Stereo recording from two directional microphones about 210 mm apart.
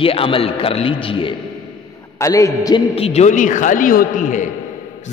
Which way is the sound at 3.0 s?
30° left (ahead or behind).